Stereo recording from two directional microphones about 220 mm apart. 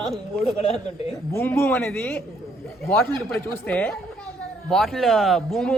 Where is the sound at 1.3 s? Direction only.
10° left (ahead or behind).